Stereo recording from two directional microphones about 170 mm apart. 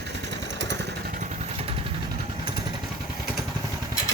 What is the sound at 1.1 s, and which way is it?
Vehicle, 45° right (ahead or behind).